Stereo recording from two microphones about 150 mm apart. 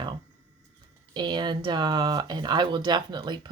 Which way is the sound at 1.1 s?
30° right (ahead or behind).